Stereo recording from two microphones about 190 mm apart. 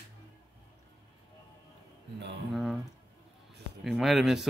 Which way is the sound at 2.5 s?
Centre (ahead or behind).